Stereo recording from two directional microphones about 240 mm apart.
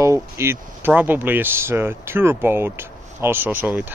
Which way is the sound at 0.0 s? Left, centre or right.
Centre.